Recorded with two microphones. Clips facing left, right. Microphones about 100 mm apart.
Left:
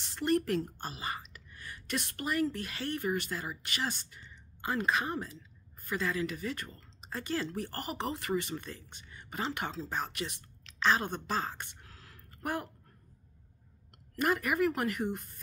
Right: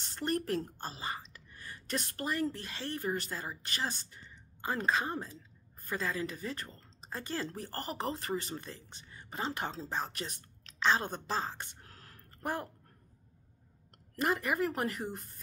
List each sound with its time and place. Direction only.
0.2 s a woman's voice: 35° right (ahead or behind)
10.8 s a woman's voice: 25° right (ahead or behind)
11.9 s a sound: 45° right (ahead or behind)
14.1 s speech: 30° right (ahead or behind)